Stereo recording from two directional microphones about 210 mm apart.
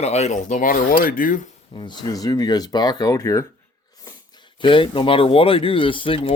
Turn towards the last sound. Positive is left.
turn(degrees=25)  # may be behind; listen again after turning